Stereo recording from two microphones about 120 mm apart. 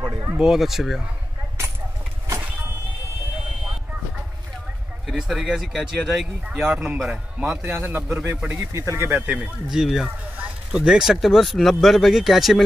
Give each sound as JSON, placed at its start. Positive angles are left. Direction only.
{"t": 0.1, "sound": "a sound", "side_deg": -35}
{"t": 0.4, "sound": "speech", "side_deg": -5}
{"t": 5.0, "sound": "speech", "side_deg": 0}
{"t": 7.6, "sound": "a man's voice", "side_deg": -15}